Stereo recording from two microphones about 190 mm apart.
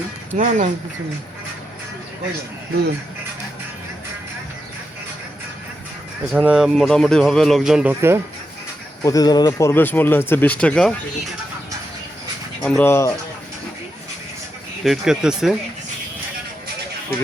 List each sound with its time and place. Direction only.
0.3 s speech: 40° right (ahead or behind)
6.3 s speech: 5° right (ahead or behind)
9.0 s speech: 20° left (ahead or behind)
12.6 s speech: 10° left (ahead or behind)
14.8 s speech: 5° right (ahead or behind)